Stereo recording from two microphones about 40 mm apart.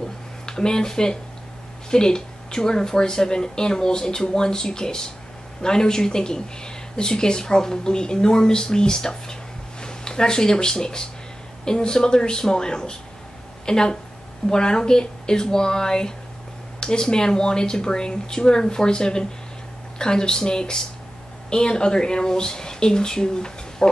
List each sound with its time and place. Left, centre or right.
0.5 s speech: centre